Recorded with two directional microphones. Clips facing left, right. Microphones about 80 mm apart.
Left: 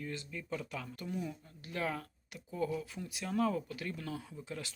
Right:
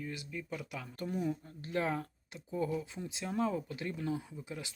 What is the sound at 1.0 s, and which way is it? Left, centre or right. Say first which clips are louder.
Speech: right 7 dB; right.